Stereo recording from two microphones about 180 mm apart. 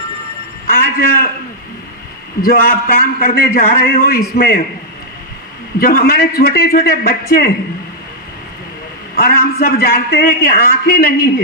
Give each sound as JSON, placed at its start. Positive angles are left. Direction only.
{"t": 0.8, "sound": "a man's voice", "side_deg": 55}
{"t": 2.4, "sound": "a man's voice", "side_deg": 55}
{"t": 5.8, "sound": "a man's voice", "side_deg": 55}
{"t": 9.1, "sound": "a man's voice", "side_deg": 55}